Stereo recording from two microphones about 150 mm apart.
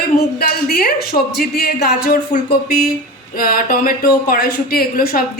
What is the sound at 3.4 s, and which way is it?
Speech, 75° left (ahead or behind).